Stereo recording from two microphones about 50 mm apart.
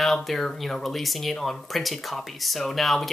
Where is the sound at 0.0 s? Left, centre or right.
Centre.